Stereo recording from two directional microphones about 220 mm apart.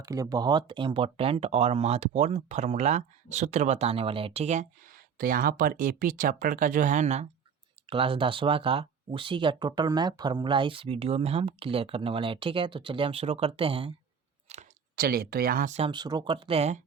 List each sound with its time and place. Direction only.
0.0 s speech: 15° right (ahead or behind)
14.4 s clicking: 30° right (ahead or behind)
14.9 s speech: 40° right (ahead or behind)